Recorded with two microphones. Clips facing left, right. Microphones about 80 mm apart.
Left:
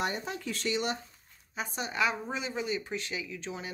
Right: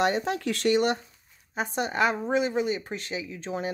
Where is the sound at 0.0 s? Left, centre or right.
Right.